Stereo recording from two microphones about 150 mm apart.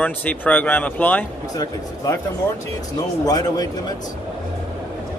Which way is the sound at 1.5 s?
25° left (ahead or behind).